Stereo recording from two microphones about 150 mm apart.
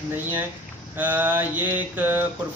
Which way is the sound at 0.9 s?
10° right (ahead or behind).